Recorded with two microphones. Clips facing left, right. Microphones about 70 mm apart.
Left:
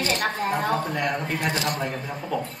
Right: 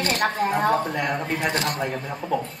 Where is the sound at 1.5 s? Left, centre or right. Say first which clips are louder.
Even; right.